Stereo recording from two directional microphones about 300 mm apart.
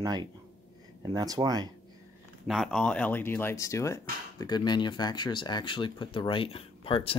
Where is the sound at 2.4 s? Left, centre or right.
Centre.